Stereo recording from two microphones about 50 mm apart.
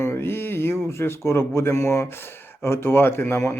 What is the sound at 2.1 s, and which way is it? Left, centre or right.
Speech, left.